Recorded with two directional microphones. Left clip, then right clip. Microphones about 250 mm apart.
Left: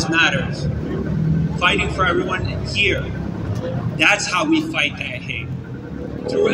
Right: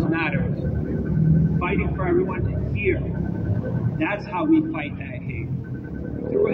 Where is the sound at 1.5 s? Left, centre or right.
Left.